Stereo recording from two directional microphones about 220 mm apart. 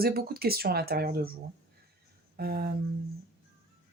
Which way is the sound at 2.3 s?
45° right (ahead or behind).